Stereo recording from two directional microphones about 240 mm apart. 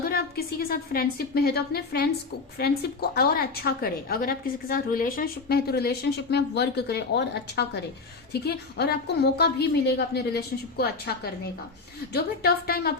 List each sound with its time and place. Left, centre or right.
0.0 s a woman's voice: left